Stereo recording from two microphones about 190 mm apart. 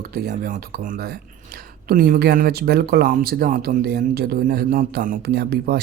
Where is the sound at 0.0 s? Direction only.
50° right (ahead or behind).